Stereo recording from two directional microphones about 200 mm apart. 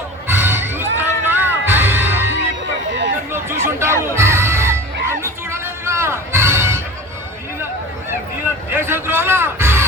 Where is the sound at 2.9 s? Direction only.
65° right (ahead or behind).